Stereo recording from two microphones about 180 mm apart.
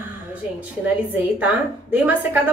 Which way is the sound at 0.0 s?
10° right (ahead or behind).